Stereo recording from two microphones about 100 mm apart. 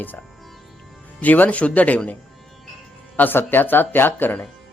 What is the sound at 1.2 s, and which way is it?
Speech, 15° left (ahead or behind).